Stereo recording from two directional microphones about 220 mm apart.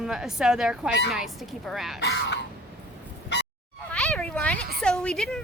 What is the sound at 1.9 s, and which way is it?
Speech, 50° left (ahead or behind).